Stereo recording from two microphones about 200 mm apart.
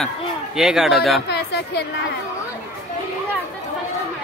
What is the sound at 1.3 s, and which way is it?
Music, 55° left (ahead or behind).